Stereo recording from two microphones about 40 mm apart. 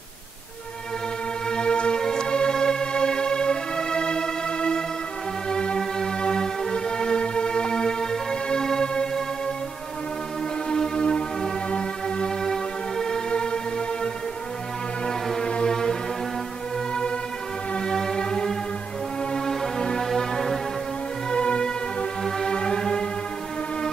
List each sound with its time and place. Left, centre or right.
1.5 s music: left
10.7 s music: centre
17.7 s music: centre
21.3 s music: left